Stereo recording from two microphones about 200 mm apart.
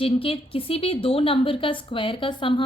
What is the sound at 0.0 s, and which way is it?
A woman's voice, 25° left (ahead or behind).